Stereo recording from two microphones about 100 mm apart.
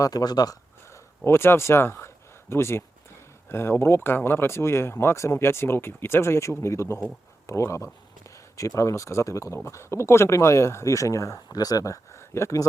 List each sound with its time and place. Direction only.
0.0 s speech: 40° left (ahead or behind)
0.9 s a sound: 25° left (ahead or behind)
3.5 s speech: 25° left (ahead or behind)